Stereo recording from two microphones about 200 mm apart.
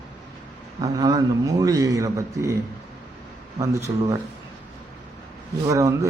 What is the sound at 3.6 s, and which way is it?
Speech, 15° right (ahead or behind).